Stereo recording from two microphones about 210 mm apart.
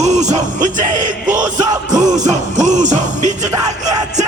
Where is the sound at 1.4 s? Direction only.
20° right (ahead or behind).